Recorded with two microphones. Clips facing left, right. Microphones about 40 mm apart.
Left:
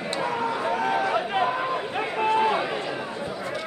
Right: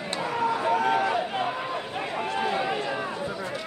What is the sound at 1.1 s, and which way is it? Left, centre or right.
Run, left.